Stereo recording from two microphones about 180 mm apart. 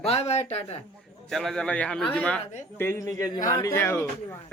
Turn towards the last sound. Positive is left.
turn(degrees=15)  # may be behind; listen again after turning